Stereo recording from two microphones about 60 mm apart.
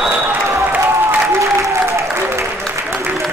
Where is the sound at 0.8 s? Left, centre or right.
Right.